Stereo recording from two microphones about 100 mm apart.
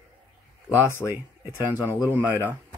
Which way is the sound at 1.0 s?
20° right (ahead or behind).